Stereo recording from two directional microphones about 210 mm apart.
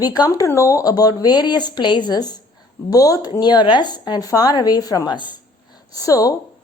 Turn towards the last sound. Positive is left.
turn(degrees=15)  # may be behind; listen again after turning